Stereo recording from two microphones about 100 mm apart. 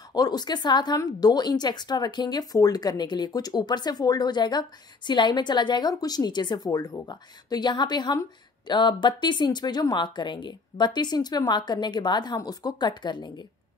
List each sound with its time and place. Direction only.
0.1 s speech: 40° left (ahead or behind)